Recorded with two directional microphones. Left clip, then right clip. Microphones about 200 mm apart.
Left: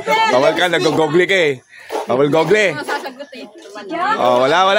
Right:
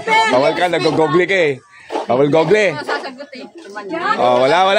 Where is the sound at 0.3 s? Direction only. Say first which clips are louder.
Left 1 dB; 10° left (ahead or behind).